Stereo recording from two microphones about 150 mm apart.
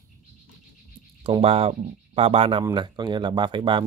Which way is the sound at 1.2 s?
40° right (ahead or behind).